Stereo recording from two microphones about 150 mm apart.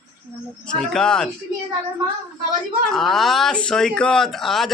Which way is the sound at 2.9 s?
Centre (ahead or behind).